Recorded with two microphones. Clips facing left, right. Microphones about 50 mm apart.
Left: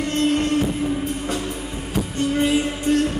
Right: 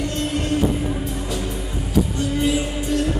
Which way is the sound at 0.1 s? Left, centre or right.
Left.